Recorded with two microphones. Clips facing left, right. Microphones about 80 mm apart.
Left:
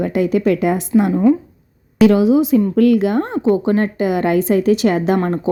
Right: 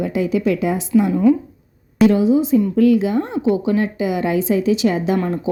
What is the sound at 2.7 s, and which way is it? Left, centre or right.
A woman's voice, left.